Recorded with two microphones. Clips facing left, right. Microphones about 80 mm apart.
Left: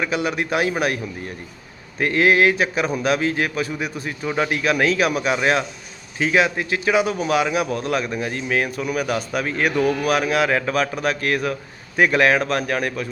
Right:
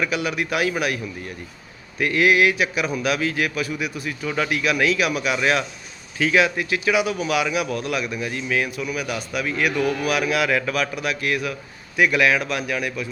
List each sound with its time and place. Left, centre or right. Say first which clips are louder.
0.0 s a man's voice: left 1 dB; left
2.0 s a man's voice: left 1 dB; left